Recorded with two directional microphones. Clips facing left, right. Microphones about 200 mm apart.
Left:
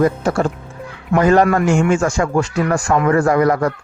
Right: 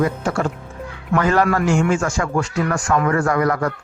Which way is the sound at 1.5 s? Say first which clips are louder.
Left 3 dB; 20° left (ahead or behind).